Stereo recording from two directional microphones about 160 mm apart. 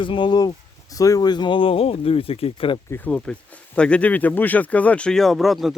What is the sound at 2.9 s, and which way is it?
Speech, 10° left (ahead or behind).